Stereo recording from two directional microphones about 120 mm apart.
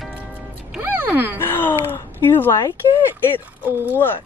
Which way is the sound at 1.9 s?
20° left (ahead or behind).